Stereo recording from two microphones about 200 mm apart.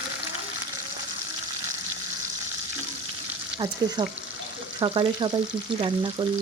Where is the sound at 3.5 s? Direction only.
20° right (ahead or behind).